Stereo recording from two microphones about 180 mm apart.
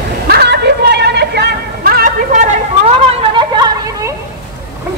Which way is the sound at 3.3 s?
25° right (ahead or behind).